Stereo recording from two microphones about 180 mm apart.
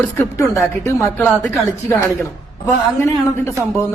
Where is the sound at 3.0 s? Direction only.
15° left (ahead or behind).